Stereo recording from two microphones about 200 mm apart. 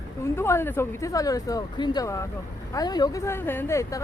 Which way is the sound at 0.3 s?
10° left (ahead or behind).